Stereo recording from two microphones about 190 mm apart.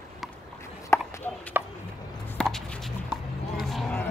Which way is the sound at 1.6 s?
10° right (ahead or behind).